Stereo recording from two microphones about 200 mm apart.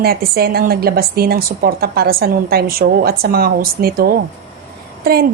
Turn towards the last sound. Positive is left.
turn(degrees=-50)  # may be behind; listen again after turning